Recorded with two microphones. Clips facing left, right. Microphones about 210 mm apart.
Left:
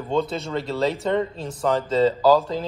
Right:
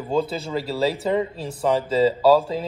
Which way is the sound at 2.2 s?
30° right (ahead or behind).